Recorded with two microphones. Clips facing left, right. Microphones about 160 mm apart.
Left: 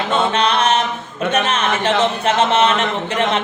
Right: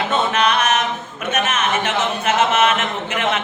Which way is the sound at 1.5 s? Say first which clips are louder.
Left 3 dB; 30° left (ahead or behind).